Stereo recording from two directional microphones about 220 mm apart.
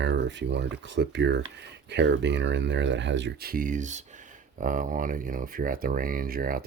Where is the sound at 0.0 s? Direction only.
50° right (ahead or behind).